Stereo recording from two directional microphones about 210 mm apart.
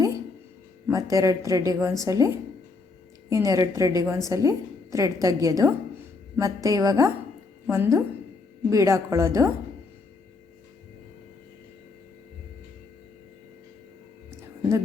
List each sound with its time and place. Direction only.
0.9 s a woman's voice: 15° right (ahead or behind)